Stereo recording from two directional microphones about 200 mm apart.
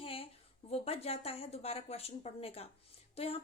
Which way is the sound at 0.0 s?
30° left (ahead or behind).